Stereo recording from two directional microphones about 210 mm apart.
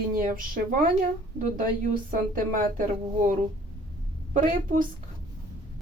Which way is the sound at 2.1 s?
40° right (ahead or behind).